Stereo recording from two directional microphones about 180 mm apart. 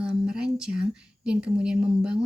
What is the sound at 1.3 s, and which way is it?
Speech, 5° right (ahead or behind).